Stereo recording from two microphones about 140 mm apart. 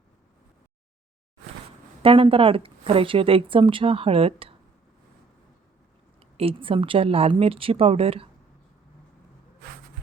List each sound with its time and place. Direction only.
2.0 s a woman's voice: 40° right (ahead or behind)
6.3 s a woman's voice: 40° right (ahead or behind)